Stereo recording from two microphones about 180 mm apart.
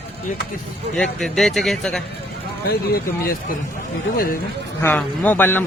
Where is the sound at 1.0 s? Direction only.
Centre (ahead or behind).